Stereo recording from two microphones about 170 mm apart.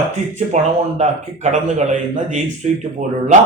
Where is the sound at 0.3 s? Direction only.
45° right (ahead or behind).